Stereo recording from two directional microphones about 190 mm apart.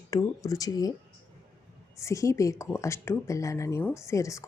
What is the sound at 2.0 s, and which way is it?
Speech, 15° left (ahead or behind).